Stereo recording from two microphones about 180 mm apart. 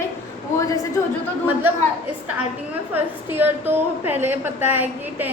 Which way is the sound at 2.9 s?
10° right (ahead or behind).